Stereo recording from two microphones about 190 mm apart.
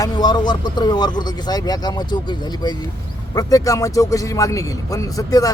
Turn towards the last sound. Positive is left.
turn(degrees=20)  # may be behind; listen again after turning